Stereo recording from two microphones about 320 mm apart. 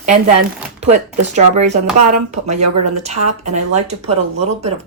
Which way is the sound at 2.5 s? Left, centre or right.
Right.